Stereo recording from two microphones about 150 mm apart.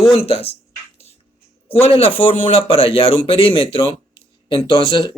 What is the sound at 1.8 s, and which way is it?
A man's voice, 40° left (ahead or behind).